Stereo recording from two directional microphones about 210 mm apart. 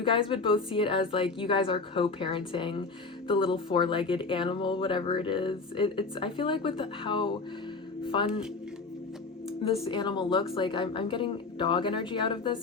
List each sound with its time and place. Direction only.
0.0 s speech: 25° left (ahead or behind)
9.8 s speech: 20° left (ahead or behind)